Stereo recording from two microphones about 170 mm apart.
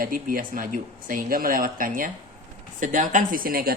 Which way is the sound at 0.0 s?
55° right (ahead or behind).